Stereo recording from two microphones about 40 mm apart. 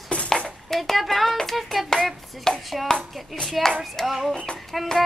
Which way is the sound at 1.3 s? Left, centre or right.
Centre.